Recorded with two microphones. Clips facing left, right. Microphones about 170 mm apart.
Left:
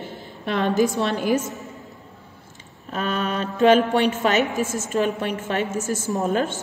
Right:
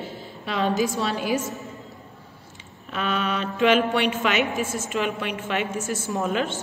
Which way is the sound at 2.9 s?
40° left (ahead or behind).